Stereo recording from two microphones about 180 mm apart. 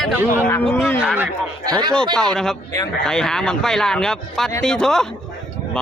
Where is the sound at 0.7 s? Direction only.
10° left (ahead or behind).